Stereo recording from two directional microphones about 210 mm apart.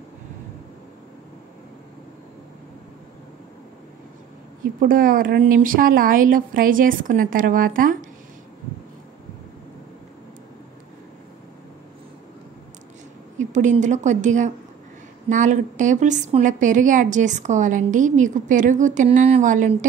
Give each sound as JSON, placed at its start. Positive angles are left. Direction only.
{"t": 4.7, "sound": "a woman's voice", "side_deg": -40}
{"t": 13.4, "sound": "a woman's voice", "side_deg": -35}